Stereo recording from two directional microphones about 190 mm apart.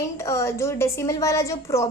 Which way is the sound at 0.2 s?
15° left (ahead or behind).